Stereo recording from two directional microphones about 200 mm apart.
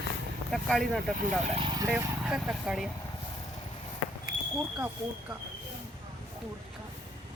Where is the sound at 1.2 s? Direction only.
35° right (ahead or behind).